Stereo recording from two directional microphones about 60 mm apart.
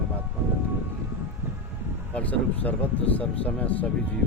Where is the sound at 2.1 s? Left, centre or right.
Left.